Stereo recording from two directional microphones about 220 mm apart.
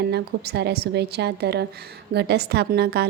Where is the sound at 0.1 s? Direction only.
50° right (ahead or behind).